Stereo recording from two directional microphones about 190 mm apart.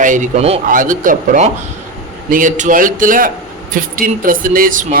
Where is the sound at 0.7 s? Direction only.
45° right (ahead or behind).